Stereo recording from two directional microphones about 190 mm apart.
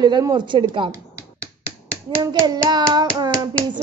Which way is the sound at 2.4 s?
20° right (ahead or behind).